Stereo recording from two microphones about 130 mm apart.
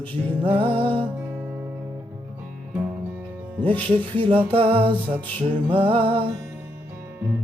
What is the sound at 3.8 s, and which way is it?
Music, 40° right (ahead or behind).